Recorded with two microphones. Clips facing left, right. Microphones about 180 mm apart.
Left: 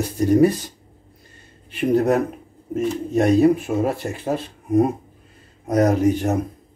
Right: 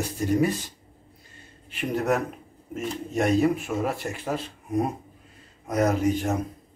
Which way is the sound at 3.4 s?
35° left (ahead or behind).